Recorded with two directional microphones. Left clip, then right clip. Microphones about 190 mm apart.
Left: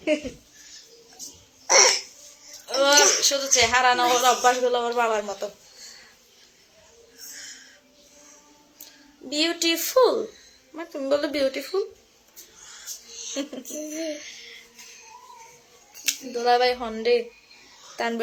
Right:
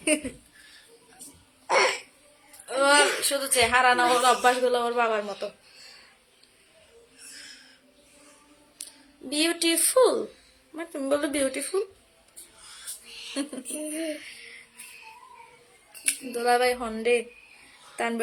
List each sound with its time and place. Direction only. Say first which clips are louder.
1.6 s cough: left 5 dB; 5° left (ahead or behind)
2.6 s speech: left 2 dB; 5° right (ahead or behind)
7.3 s a sound: left 4 dB; centre (ahead or behind)
9.3 s a woman's voice: left 2 dB; 15° right (ahead or behind)
13.3 s a woman's voice: left 2 dB; 15° right (ahead or behind)
13.7 s a sound: left 1 dB; 5° right (ahead or behind)
16.4 s a woman's voice: left 2 dB; 15° right (ahead or behind)